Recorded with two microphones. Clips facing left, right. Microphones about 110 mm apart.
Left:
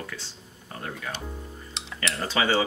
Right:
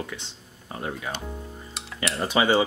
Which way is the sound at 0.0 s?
20° right (ahead or behind).